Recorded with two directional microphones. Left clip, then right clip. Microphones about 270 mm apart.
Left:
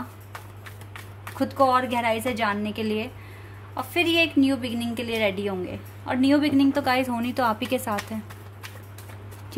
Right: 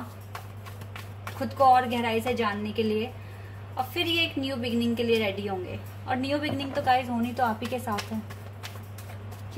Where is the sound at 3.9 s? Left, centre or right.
Left.